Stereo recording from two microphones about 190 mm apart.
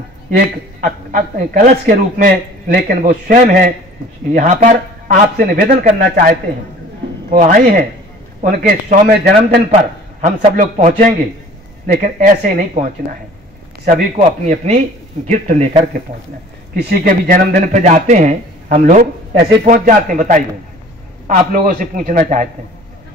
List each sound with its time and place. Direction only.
0.8 s a man's voice: 45° right (ahead or behind)
7.3 s a man's voice: 45° right (ahead or behind)
10.2 s a man's voice: 40° right (ahead or behind)
16.7 s a man's voice: 50° right (ahead or behind)